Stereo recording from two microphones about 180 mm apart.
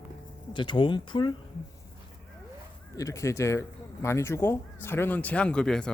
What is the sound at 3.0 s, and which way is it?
Speech, 15° left (ahead or behind).